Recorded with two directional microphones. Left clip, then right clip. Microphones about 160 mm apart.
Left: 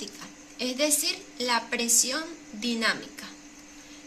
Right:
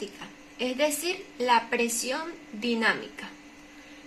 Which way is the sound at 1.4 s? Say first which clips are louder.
Right 4 dB; 35° right (ahead or behind).